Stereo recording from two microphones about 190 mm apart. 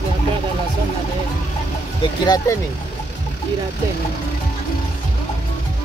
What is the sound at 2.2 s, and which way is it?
Speech, 20° left (ahead or behind).